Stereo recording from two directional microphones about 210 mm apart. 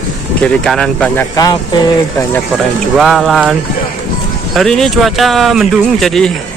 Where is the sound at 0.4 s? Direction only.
5° left (ahead or behind).